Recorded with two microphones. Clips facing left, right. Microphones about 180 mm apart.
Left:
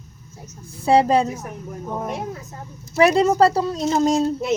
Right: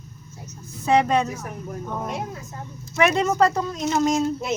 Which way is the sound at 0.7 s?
30° left (ahead or behind).